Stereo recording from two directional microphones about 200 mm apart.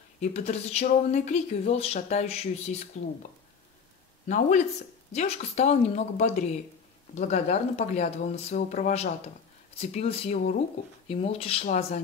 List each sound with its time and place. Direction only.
0.2 s speech: 30° left (ahead or behind)
4.3 s speech: 40° left (ahead or behind)